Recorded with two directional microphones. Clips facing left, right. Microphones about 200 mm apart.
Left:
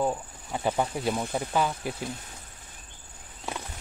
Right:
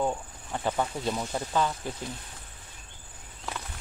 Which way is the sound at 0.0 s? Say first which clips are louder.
Left 1 dB; 5° left (ahead or behind).